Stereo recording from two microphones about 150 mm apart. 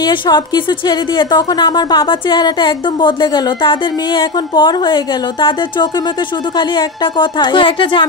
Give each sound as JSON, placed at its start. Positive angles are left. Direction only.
{"t": 0.0, "sound": "a woman's voice", "side_deg": 30}